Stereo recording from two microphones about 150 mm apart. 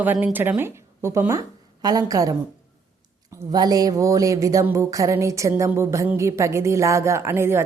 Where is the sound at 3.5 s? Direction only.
25° right (ahead or behind).